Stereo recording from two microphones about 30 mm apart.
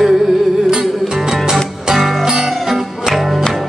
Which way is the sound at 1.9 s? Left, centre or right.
Centre.